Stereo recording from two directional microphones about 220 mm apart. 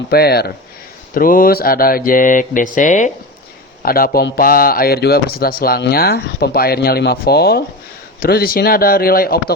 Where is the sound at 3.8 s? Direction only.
40° left (ahead or behind).